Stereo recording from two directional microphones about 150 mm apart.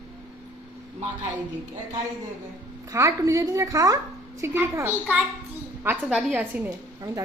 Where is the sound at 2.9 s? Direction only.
20° right (ahead or behind).